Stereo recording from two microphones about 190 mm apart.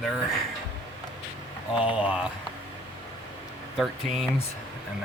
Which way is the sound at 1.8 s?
5° right (ahead or behind).